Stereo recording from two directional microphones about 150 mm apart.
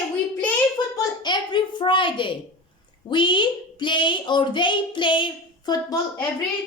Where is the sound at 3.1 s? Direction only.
30° left (ahead or behind).